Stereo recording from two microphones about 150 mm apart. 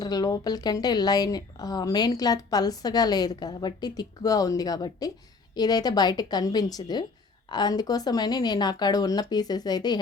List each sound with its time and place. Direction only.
0.0 s speech: 25° left (ahead or behind)